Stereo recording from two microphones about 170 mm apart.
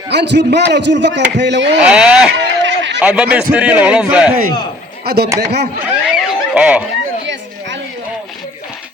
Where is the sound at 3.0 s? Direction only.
5° right (ahead or behind).